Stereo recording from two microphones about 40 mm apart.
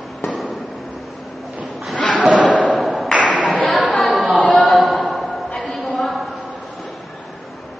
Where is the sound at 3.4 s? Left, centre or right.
Left.